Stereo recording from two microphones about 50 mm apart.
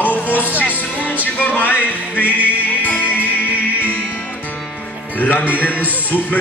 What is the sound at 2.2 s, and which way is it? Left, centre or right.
Music, right.